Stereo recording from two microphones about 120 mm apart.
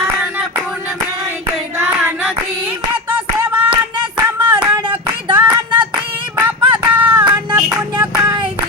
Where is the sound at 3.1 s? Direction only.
15° right (ahead or behind).